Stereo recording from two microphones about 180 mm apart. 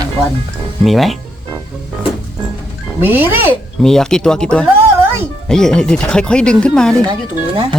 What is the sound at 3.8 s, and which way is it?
Speech, 5° left (ahead or behind).